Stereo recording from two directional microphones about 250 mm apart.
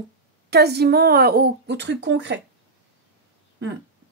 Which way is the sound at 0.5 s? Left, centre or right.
Right.